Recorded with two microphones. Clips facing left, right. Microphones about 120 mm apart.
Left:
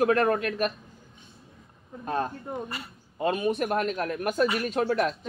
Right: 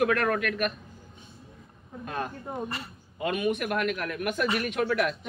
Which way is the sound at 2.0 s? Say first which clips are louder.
Left 4 dB; 35° left (ahead or behind).